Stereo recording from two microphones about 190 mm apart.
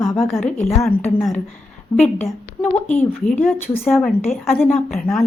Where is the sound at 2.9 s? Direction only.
45° left (ahead or behind).